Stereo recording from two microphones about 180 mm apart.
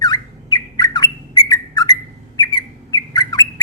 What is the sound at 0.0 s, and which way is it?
Bird, 20° left (ahead or behind).